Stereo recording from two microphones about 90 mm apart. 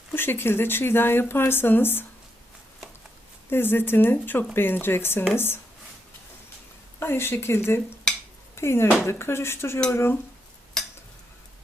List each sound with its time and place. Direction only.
0.1 s speech: 25° left (ahead or behind)
3.5 s speech: 25° left (ahead or behind)
7.0 s speech: 25° left (ahead or behind)